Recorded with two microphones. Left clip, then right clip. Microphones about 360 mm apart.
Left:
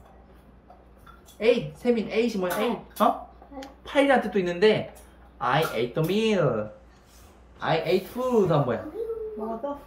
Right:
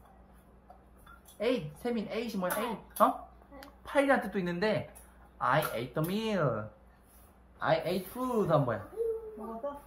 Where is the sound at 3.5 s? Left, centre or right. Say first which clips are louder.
Left 6 dB; centre.